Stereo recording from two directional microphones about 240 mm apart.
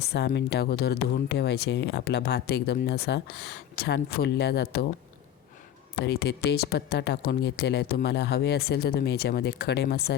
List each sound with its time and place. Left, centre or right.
0.0 s speech: left
6.0 s speech: left